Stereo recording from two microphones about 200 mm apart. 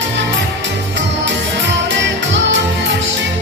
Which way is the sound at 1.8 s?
65° right (ahead or behind).